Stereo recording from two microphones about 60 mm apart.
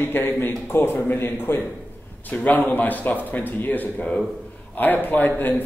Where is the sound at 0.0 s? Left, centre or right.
Left.